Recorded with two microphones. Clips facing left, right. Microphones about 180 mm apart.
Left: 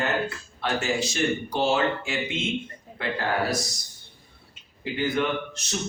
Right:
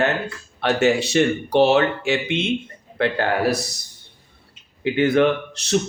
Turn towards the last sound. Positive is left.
turn(degrees=-75)  # may be behind; listen again after turning